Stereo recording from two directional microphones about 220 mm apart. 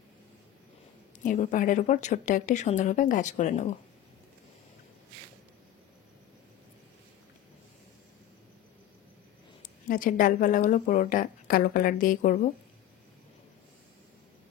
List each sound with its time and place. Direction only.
1.2 s speech: 35° left (ahead or behind)
9.6 s speech: 40° left (ahead or behind)